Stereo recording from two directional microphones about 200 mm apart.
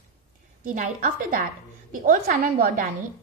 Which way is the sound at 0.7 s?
40° right (ahead or behind).